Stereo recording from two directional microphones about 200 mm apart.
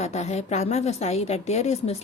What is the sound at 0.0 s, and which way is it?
A woman's voice, 35° left (ahead or behind).